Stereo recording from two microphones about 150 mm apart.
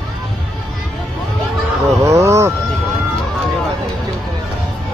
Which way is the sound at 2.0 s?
20° right (ahead or behind).